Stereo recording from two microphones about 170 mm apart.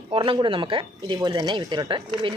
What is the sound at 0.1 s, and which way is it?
Speech, 30° right (ahead or behind).